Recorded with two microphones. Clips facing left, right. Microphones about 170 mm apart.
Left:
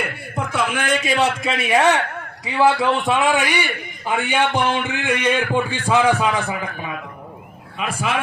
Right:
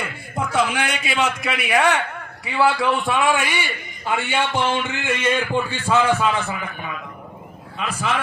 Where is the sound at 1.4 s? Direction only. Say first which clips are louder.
Left 2 dB; 25° left (ahead or behind).